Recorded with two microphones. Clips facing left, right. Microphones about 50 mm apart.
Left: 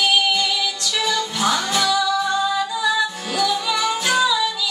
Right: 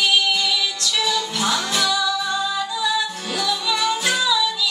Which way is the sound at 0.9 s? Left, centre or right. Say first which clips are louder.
Even; left.